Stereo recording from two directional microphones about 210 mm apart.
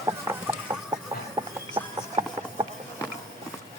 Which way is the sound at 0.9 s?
20° right (ahead or behind).